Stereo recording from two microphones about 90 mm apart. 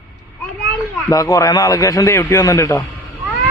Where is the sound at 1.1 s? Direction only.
40° left (ahead or behind).